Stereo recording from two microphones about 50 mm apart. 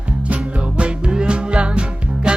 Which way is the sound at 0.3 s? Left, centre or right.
Right.